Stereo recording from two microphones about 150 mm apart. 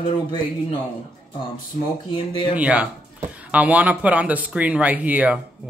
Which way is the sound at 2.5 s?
10° right (ahead or behind).